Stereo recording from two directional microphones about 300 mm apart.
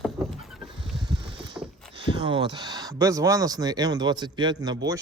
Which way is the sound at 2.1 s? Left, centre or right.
Centre.